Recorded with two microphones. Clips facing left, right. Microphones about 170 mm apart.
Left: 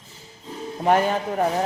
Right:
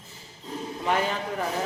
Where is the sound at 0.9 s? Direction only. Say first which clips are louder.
Left 7 dB; 50° left (ahead or behind).